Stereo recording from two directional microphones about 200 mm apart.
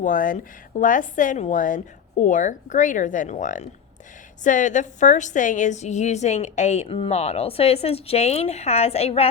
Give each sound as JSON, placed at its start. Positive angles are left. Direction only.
{"t": 0.0, "sound": "a woman's voice", "side_deg": 40}